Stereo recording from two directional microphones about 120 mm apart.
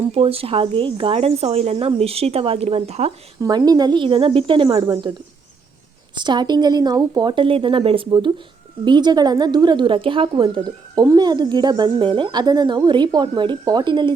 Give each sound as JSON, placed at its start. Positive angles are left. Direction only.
{"t": 0.1, "sound": "speech", "side_deg": -55}
{"t": 3.4, "sound": "speech", "side_deg": -30}
{"t": 6.1, "sound": "speech", "side_deg": -40}